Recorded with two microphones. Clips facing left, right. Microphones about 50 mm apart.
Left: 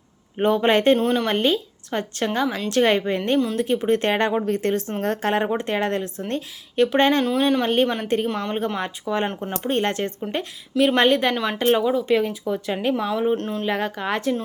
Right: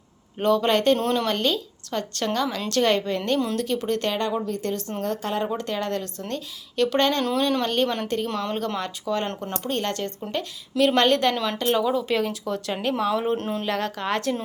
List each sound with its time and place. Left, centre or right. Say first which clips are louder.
0.3 s a woman's voice: left 2 dB; left
0.9 s a woman's voice: left 3 dB; centre
1.3 s a woman's voice: left 3 dB; left
4.1 s a woman's voice: left 5 dB; left; by 9.6 s centre
9.6 s a woman's voice: left 5 dB; left; by 11.5 s centre
11.5 s a woman's voice: left 3 dB; left; by 13.7 s centre
13.7 s a woman's voice: left 3 dB; centre